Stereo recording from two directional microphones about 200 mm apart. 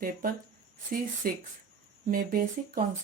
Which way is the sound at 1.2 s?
45° right (ahead or behind).